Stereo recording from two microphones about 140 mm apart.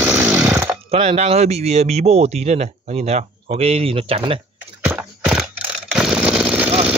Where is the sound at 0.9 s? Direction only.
45° right (ahead or behind).